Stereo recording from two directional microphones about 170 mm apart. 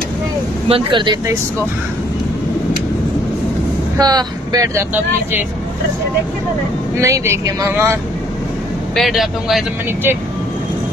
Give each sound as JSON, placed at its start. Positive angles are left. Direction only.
{"t": 0.7, "sound": "speech", "side_deg": -30}
{"t": 4.0, "sound": "speech", "side_deg": -25}
{"t": 7.0, "sound": "speech", "side_deg": -15}
{"t": 8.9, "sound": "speech", "side_deg": 0}